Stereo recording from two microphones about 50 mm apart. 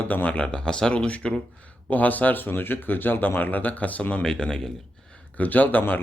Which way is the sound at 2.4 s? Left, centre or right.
Left.